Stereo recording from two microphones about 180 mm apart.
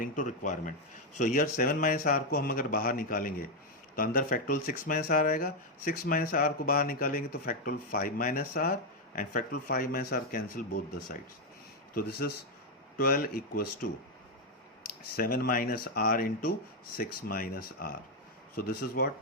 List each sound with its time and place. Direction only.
0.0 s speech: 45° left (ahead or behind)
13.0 s speech: 55° left (ahead or behind)
15.1 s speech: 55° left (ahead or behind)